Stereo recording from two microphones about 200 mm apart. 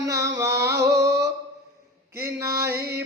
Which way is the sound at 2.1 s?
15° right (ahead or behind).